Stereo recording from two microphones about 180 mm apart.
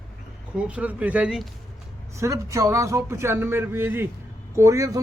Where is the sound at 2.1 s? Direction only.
15° right (ahead or behind).